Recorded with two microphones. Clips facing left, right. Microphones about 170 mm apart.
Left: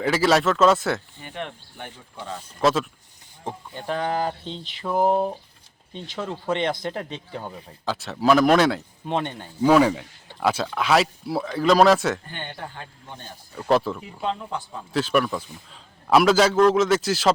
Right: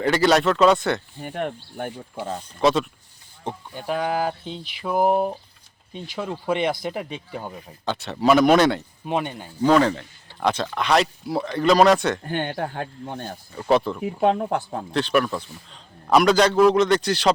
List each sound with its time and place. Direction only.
0.0 s a man's voice: centre (ahead or behind)
1.2 s speech: 45° right (ahead or behind)
2.6 s a man's voice: centre (ahead or behind)
7.9 s a man's voice: centre (ahead or behind)
9.6 s a man's voice: 10° left (ahead or behind)
12.3 s speech: 55° right (ahead or behind)
13.6 s a man's voice: centre (ahead or behind)
14.0 s speech: 55° right (ahead or behind)
14.9 s a man's voice: centre (ahead or behind)